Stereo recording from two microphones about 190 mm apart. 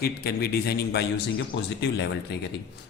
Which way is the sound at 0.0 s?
55° left (ahead or behind).